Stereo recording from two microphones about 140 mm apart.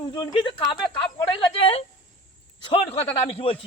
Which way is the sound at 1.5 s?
40° left (ahead or behind).